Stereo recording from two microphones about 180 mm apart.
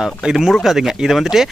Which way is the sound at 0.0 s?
5° right (ahead or behind).